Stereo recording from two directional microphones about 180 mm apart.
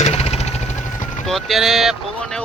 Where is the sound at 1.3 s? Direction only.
Centre (ahead or behind).